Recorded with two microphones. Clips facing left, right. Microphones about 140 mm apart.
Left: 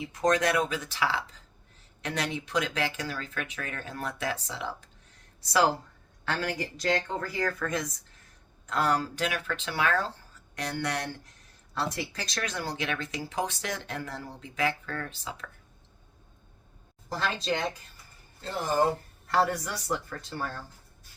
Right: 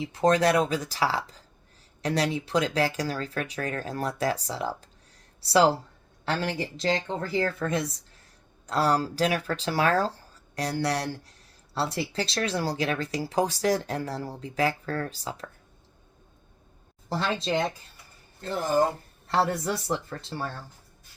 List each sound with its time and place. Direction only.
0.0 s speech: 30° right (ahead or behind)
19.3 s speech: 30° right (ahead or behind)